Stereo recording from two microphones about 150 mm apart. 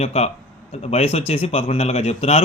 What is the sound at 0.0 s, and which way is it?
Speech, 45° left (ahead or behind).